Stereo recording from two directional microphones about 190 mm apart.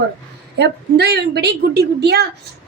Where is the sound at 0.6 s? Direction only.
60° right (ahead or behind).